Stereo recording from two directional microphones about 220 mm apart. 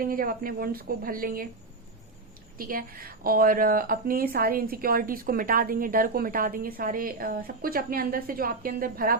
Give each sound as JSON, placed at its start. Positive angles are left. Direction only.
{"t": 0.0, "sound": "a woman's voice", "side_deg": -40}
{"t": 2.6, "sound": "a woman's voice", "side_deg": -40}